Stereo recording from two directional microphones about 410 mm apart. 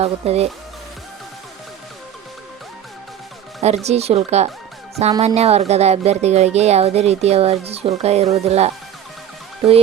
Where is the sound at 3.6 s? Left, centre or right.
Centre.